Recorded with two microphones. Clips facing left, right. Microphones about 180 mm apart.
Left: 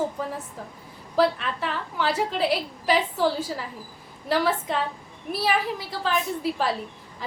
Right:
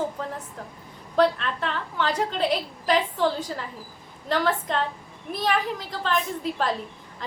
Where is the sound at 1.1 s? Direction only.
5° left (ahead or behind).